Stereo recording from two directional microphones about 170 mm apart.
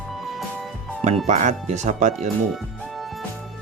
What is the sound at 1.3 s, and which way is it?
Speech, 40° right (ahead or behind).